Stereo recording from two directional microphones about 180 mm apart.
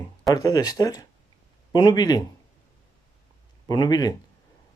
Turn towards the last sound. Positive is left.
turn(degrees=20)  # may be behind; listen again after turning